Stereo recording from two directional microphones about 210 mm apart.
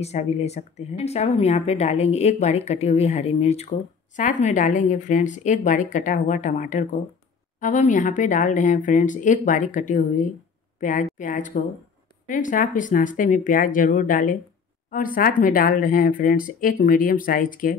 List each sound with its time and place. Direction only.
0.0 s speech: 30° left (ahead or behind)